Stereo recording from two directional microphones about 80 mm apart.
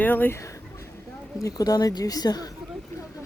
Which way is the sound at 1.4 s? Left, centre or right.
Left.